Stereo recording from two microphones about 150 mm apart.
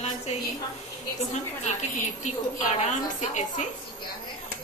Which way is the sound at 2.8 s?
50° left (ahead or behind).